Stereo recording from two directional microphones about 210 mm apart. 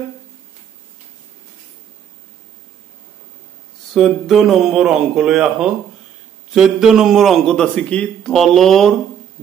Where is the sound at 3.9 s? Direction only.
Centre (ahead or behind).